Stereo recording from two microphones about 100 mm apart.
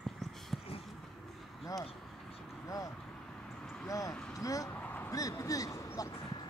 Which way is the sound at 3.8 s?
35° left (ahead or behind).